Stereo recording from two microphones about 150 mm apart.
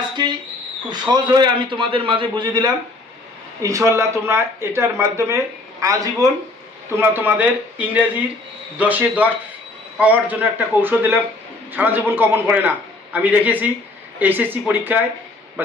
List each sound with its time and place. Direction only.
0.8 s speech: 30° right (ahead or behind)
3.6 s a man's voice: 20° right (ahead or behind)